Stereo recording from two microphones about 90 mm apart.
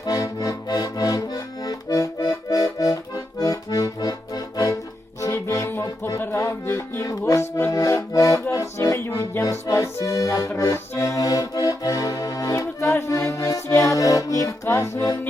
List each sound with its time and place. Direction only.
0.0 s accordion: 45° left (ahead or behind)
5.2 s music: 35° left (ahead or behind)
7.1 s music: 40° left (ahead or behind)
9.4 s accordion: 40° left (ahead or behind)
12.9 s music: 30° left (ahead or behind)